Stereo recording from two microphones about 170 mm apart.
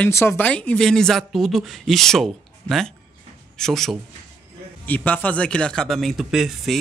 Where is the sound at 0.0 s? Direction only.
15° left (ahead or behind).